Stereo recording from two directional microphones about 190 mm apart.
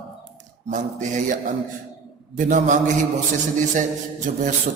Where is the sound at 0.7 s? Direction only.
40° right (ahead or behind).